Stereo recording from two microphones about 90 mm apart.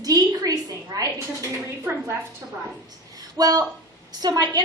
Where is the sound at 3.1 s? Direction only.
45° right (ahead or behind).